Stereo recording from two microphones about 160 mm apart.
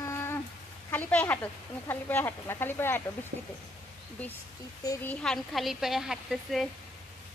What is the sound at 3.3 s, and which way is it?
Speech, 70° right (ahead or behind).